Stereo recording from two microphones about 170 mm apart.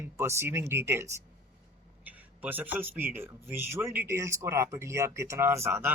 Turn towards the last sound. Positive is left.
turn(degrees=-15)  # may be behind; listen again after turning